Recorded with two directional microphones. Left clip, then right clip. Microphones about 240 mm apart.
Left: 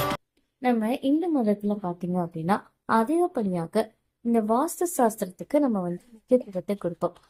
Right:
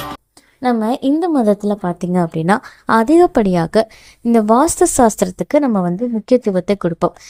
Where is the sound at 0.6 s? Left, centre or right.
Centre.